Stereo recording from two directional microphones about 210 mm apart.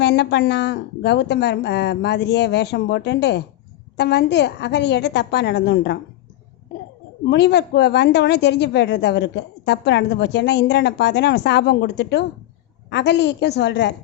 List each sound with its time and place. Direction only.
0.0 s a woman's voice: 55° left (ahead or behind)
7.3 s a woman's voice: 55° left (ahead or behind)